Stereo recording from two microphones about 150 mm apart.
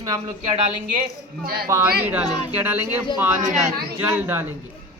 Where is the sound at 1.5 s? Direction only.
90° right.